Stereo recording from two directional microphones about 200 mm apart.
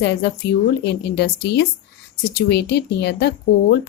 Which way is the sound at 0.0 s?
55° left (ahead or behind).